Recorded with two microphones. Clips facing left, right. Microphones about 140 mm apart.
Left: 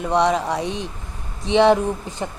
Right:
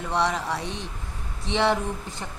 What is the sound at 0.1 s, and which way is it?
Speech, 20° left (ahead or behind).